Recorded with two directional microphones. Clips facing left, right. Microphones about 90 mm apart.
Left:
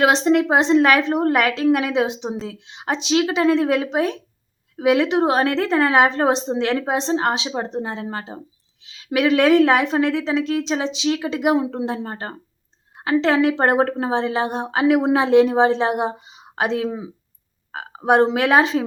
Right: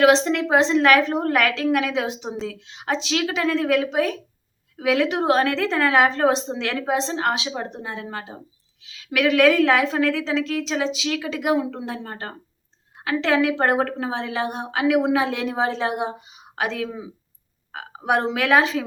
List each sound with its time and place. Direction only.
0.0 s a woman's voice: 25° left (ahead or behind)